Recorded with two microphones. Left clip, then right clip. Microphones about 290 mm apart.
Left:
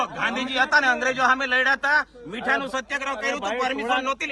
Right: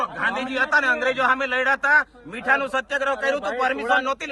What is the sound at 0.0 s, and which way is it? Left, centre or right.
A man's voice, centre.